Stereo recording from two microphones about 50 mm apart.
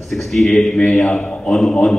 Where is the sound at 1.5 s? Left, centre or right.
Centre.